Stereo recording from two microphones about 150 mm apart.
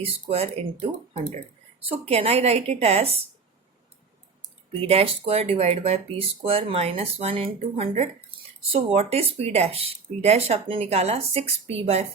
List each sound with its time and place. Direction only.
0.0 s speech: 40° right (ahead or behind)
4.9 s speech: 40° right (ahead or behind)